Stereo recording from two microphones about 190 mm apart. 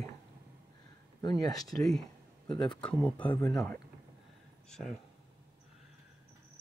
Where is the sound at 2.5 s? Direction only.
5° left (ahead or behind).